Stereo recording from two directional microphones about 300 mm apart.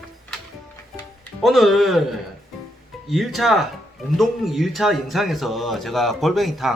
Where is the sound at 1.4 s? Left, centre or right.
Centre.